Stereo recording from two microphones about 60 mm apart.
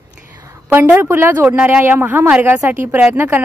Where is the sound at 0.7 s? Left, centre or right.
Right.